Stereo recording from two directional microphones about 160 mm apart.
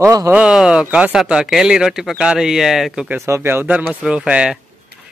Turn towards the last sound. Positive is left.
turn(degrees=-5)  # may be behind; listen again after turning